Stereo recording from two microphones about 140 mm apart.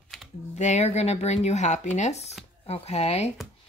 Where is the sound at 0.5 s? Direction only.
55° left (ahead or behind).